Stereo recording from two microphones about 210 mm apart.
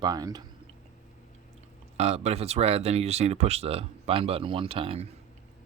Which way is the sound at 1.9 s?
30° right (ahead or behind).